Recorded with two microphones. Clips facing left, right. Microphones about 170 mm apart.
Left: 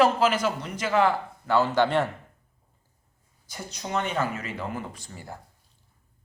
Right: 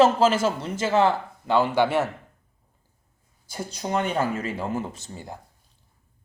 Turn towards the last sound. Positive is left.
turn(degrees=-20)  # may be behind; listen again after turning